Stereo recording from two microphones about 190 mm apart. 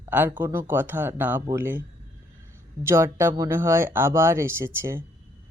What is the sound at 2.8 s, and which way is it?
Speech, 15° right (ahead or behind).